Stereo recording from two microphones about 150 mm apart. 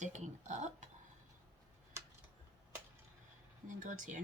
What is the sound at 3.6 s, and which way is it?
Speech, 55° right (ahead or behind).